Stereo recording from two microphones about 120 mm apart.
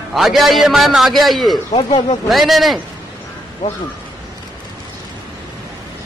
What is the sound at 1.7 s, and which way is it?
Speech, 50° left (ahead or behind).